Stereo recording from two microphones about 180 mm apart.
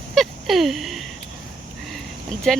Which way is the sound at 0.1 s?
Centre (ahead or behind).